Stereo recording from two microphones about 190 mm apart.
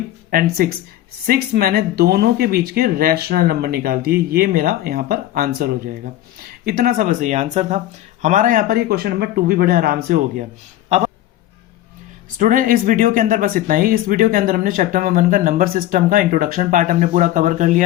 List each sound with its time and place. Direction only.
0.3 s speech: 50° right (ahead or behind)
10.8 s a sound: 35° right (ahead or behind)
12.4 s speech: 45° right (ahead or behind)